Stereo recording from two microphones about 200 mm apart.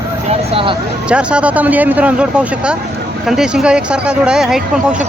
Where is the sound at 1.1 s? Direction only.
5° right (ahead or behind).